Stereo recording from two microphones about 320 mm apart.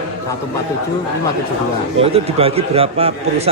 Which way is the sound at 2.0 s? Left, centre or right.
Centre.